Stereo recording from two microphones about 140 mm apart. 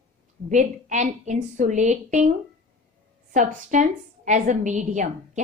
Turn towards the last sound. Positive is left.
turn(degrees=-60)  # may be behind; listen again after turning